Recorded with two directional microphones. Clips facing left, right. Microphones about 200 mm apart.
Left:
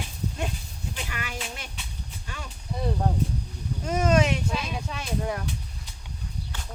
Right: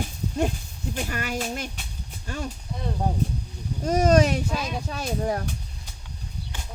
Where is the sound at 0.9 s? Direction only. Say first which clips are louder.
Right 8 dB; 45° right (ahead or behind).